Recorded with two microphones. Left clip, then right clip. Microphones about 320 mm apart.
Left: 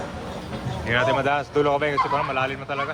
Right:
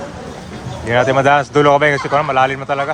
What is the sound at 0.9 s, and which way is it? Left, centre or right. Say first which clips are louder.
Speech: right 9 dB; centre.